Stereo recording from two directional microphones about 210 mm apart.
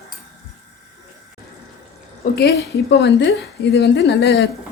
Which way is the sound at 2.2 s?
50° left (ahead or behind).